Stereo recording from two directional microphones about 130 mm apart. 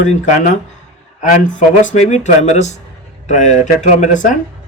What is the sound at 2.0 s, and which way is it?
Speech, 65° left (ahead or behind).